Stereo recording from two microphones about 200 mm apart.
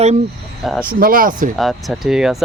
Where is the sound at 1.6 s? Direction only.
Centre (ahead or behind).